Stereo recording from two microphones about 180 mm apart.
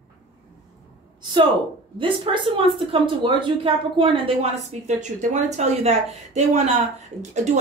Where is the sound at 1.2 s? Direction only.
25° right (ahead or behind).